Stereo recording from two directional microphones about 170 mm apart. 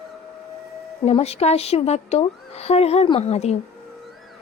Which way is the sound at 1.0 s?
40° left (ahead or behind).